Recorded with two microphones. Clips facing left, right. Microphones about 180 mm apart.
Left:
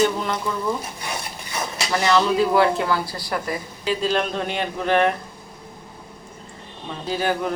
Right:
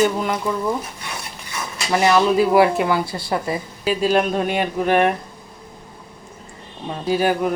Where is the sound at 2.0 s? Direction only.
15° right (ahead or behind).